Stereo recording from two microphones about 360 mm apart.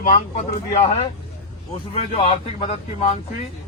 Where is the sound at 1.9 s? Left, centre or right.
Centre.